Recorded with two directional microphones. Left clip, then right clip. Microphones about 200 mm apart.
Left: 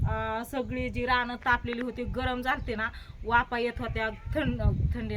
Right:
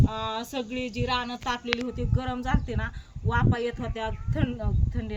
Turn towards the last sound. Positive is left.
turn(degrees=10)  # may be behind; listen again after turning